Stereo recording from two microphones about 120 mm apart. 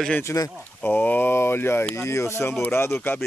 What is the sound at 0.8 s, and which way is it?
Speech, 15° left (ahead or behind).